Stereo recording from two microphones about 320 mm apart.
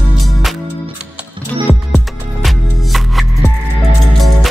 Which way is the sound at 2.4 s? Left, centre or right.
Centre.